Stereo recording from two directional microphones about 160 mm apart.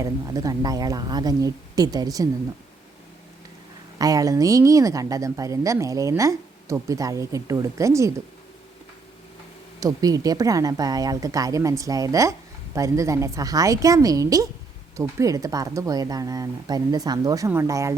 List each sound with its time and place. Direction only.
0.0 s speech: 20° right (ahead or behind)
3.9 s speech: 20° right (ahead or behind)
9.8 s speech: 25° right (ahead or behind)